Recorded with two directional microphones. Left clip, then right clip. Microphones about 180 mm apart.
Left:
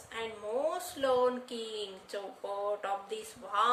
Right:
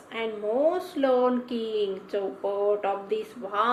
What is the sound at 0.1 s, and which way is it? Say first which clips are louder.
Speech: right 9 dB; 40° left (ahead or behind).